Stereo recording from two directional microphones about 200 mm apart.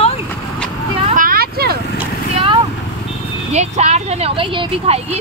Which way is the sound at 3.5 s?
35° right (ahead or behind).